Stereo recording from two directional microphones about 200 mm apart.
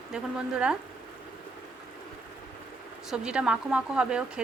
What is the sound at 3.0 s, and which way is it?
A woman's voice, 5° right (ahead or behind).